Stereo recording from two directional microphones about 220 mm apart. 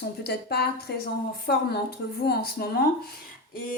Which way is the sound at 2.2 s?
45° left (ahead or behind).